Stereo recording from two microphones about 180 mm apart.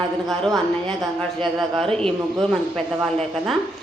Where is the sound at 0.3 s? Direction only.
Centre (ahead or behind).